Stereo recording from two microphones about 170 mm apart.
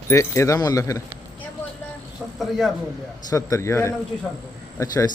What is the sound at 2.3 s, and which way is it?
Speech, centre (ahead or behind).